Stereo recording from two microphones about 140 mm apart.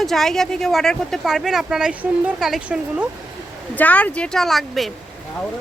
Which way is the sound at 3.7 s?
10° left (ahead or behind).